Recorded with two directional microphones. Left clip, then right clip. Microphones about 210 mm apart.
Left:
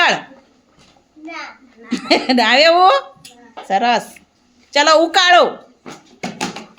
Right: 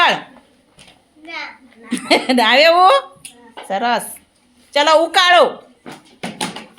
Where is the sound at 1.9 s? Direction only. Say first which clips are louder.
Even; 10° left (ahead or behind).